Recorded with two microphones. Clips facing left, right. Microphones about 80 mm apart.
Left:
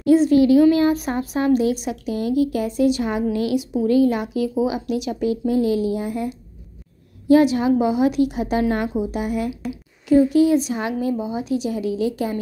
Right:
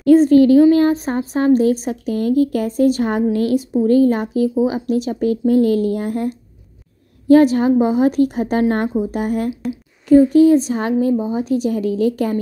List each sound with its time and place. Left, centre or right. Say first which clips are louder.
0.0 s a woman's voice: right 4 dB; right